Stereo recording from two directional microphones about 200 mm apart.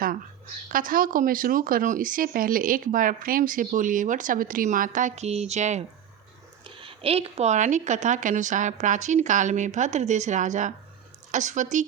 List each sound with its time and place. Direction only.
0.7 s a woman's voice: 45° right (ahead or behind)